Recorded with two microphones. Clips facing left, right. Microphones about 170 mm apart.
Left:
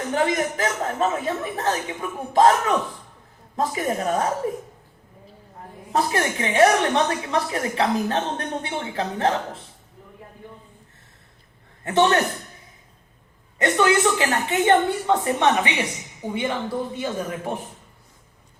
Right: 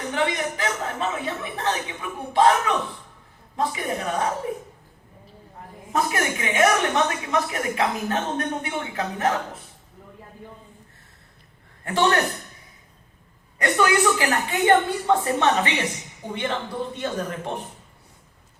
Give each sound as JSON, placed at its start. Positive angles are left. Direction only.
{"t": 0.1, "sound": "a woman's voice", "side_deg": 40}
{"t": 5.9, "sound": "a woman's voice", "side_deg": 30}
{"t": 11.8, "sound": "a man's voice", "side_deg": 20}
{"t": 13.6, "sound": "a woman's voice", "side_deg": 20}